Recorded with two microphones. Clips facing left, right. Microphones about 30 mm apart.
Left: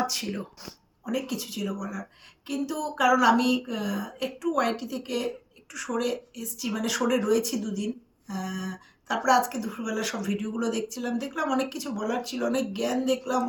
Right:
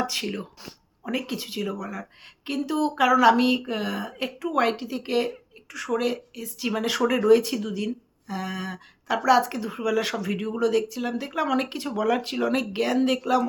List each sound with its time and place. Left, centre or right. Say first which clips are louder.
0.0 s speech: right 2 dB; right
1.0 s speech: right 1 dB; right
2.6 s speech: right 6 dB; right
2.9 s speech: right 2 dB; right
4.4 s speech: right 3 dB; right
6.6 s speech: right 3 dB; right
7.0 s speech: right 2 dB; centre
7.3 s speech: right 6 dB; right
9.0 s speech: right 2 dB; right